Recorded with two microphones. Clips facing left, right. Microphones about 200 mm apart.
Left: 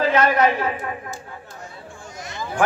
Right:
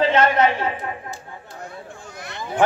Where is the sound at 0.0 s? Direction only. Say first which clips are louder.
Right 1 dB; 30° right (ahead or behind).